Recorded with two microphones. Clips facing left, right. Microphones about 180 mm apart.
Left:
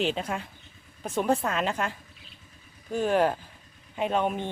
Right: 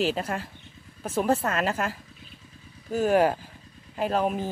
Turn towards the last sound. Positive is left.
turn(degrees=0)  # may be behind; listen again after turning